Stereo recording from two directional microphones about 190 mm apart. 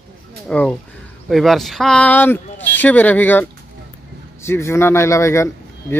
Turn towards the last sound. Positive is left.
turn(degrees=15)  # may be behind; listen again after turning